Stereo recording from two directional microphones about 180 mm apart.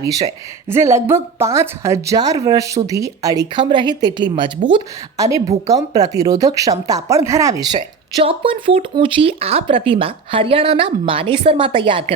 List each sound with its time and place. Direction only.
0.0 s speech: 20° right (ahead or behind)
8.2 s speech: 30° right (ahead or behind)